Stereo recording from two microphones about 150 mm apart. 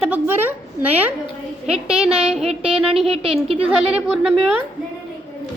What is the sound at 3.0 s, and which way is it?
Speech, 40° right (ahead or behind).